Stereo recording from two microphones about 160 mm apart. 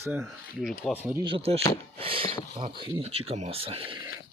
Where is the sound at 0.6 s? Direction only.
Centre (ahead or behind).